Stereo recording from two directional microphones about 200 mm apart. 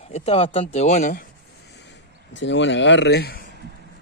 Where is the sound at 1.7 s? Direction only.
60° left (ahead or behind).